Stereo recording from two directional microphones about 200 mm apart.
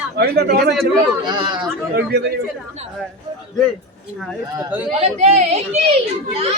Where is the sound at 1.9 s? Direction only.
50° right (ahead or behind).